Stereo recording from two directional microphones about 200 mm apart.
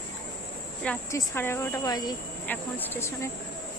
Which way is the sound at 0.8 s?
10° left (ahead or behind).